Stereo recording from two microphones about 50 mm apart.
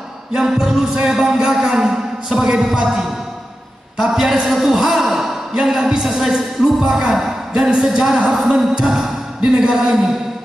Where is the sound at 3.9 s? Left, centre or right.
Centre.